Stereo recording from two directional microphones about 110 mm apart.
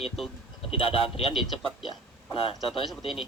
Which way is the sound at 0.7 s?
60° left (ahead or behind).